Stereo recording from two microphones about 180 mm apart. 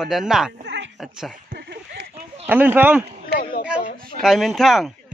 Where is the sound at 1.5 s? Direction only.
65° right (ahead or behind).